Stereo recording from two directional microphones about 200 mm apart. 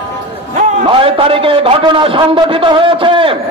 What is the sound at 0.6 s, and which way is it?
A man's voice, 25° right (ahead or behind).